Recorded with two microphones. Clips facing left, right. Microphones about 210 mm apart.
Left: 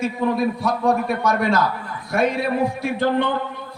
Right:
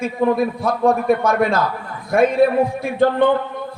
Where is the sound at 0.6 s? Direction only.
55° right (ahead or behind).